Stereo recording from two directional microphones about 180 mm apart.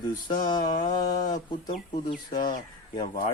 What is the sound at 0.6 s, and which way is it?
Mantra, 45° left (ahead or behind).